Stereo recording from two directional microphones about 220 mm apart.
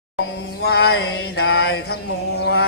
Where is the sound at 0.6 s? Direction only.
45° left (ahead or behind).